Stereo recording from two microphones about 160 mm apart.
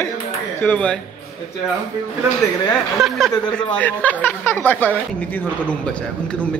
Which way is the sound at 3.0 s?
Centre (ahead or behind).